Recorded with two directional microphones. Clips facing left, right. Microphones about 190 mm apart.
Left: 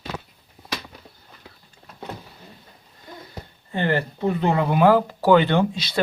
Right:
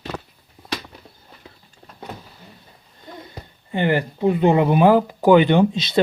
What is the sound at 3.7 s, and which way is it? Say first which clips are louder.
Speech: right 3 dB; 15° right (ahead or behind).